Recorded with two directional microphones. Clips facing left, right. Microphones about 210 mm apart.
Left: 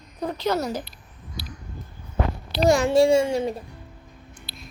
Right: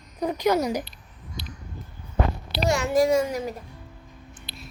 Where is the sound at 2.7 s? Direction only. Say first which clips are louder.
Left 4 dB; 30° left (ahead or behind).